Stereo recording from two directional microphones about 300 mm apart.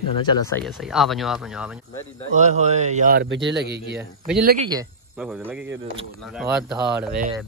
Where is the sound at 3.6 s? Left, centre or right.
Right.